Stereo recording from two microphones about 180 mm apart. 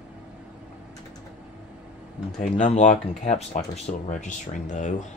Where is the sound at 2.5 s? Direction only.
40° left (ahead or behind).